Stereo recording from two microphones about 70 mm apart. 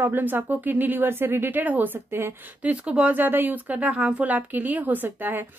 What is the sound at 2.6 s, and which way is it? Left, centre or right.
Speech, centre.